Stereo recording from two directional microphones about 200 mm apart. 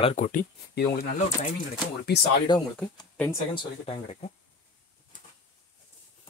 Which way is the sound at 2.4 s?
20° left (ahead or behind).